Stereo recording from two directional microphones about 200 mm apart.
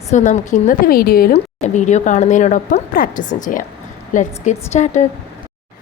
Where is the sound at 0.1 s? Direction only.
35° left (ahead or behind).